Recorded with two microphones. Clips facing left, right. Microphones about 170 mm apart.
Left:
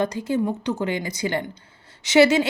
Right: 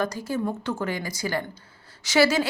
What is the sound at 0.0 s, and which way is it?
Speech, 20° left (ahead or behind).